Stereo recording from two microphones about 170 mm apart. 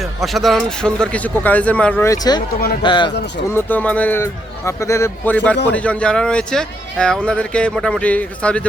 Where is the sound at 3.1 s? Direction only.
90° left.